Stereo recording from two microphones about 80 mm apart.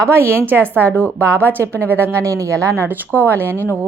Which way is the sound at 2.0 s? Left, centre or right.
Right.